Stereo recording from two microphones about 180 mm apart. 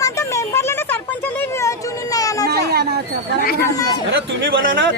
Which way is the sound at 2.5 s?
65° right (ahead or behind).